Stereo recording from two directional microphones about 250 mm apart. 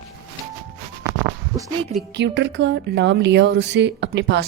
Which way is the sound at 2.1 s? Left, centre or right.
Right.